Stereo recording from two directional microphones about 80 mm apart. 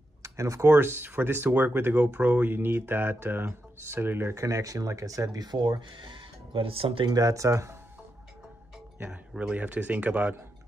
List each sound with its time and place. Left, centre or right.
0.2 s speech: right
7.1 s speech: right
9.3 s speech: centre